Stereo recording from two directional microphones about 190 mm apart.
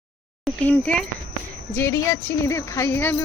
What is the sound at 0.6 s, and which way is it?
Speech, 5° left (ahead or behind).